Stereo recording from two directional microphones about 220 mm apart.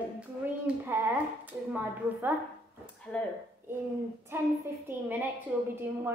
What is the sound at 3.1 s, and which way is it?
Speech, 5° left (ahead or behind).